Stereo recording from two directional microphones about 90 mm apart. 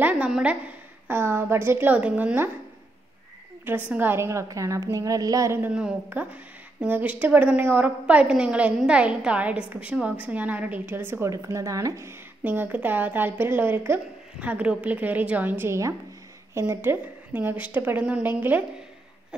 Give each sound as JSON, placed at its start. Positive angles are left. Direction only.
{"t": 0.3, "sound": "a woman's voice", "side_deg": -10}
{"t": 1.0, "sound": "a woman's voice", "side_deg": -25}
{"t": 3.6, "sound": "a woman's voice", "side_deg": -20}
{"t": 4.9, "sound": "a sound", "side_deg": -40}
{"t": 5.7, "sound": "a woman's voice", "side_deg": -10}
{"t": 12.4, "sound": "a woman's voice", "side_deg": -20}